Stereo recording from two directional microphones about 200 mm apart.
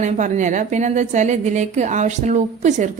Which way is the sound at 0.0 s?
40° right (ahead or behind).